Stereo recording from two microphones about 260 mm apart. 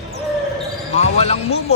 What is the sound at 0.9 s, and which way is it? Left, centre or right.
Speech, left.